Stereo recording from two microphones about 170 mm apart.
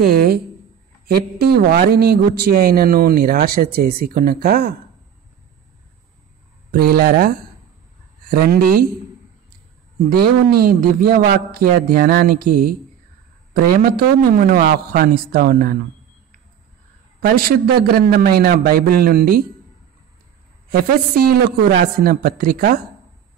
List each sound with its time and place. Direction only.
0.0 s a man's voice: 60° right (ahead or behind)
6.7 s a man's voice: 60° right (ahead or behind)
10.0 s a man's voice: 65° right (ahead or behind)
17.2 s a man's voice: 60° right (ahead or behind)
21.2 s a man's voice: 60° right (ahead or behind)